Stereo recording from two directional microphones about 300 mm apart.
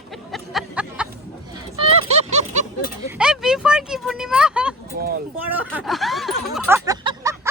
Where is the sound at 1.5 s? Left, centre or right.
Centre.